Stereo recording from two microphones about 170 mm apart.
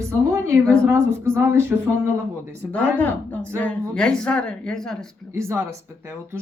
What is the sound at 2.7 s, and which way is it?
A woman's voice, 10° left (ahead or behind).